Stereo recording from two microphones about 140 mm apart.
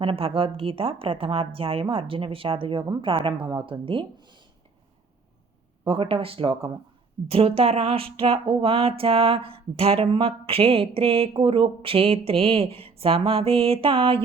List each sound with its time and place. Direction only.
0.0 s speech: 40° right (ahead or behind)
5.8 s speech: 40° right (ahead or behind)